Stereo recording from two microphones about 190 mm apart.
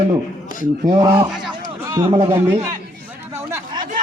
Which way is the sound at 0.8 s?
20° right (ahead or behind).